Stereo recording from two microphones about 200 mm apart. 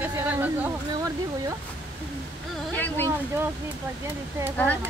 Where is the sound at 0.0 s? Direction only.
10° right (ahead or behind).